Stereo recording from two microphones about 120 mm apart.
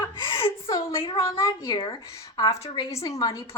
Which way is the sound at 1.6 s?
45° left (ahead or behind).